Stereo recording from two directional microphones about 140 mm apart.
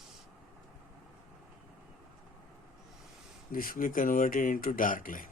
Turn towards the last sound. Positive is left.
turn(degrees=75)  # may be behind; listen again after turning